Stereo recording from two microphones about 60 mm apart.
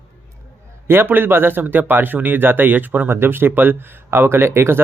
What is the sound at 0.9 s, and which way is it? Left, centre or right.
Speech, right.